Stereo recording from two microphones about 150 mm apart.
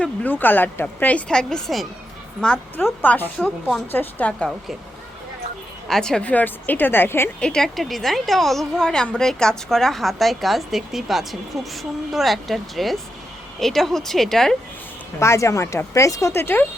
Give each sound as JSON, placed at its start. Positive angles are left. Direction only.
{"t": 0.0, "sound": "speech", "side_deg": 10}
{"t": 5.9, "sound": "a woman's voice", "side_deg": 5}
{"t": 15.2, "sound": "speech", "side_deg": 20}